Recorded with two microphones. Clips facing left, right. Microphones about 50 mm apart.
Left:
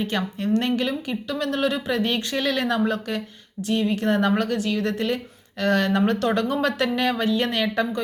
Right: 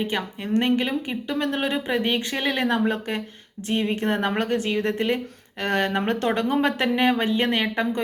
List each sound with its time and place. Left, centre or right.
0.0 s speech: centre